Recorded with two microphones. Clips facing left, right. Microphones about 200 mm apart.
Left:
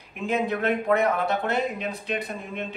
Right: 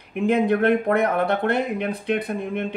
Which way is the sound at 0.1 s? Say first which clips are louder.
Right 7 dB; 55° right (ahead or behind).